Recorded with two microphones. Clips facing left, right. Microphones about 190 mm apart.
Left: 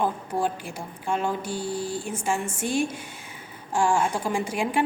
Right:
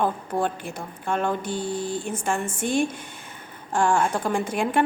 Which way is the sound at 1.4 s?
10° left (ahead or behind).